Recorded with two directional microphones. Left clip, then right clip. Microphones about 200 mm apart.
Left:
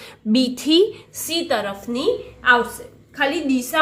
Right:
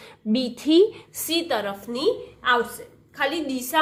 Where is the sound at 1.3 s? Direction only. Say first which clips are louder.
Left 3 dB; 25° right (ahead or behind).